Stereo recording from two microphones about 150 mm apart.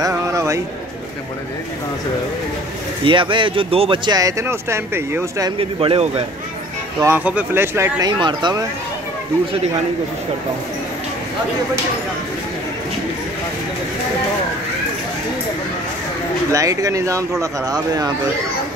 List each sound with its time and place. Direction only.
0.0 s a sound: 20° right (ahead or behind)
3.1 s speech: 35° right (ahead or behind); by 5.5 s 15° right (ahead or behind)
5.6 s speech: 40° right (ahead or behind)
7.0 s speech: 15° right (ahead or behind)
8.2 s speech: 30° right (ahead or behind)
16.5 s speech: 20° right (ahead or behind)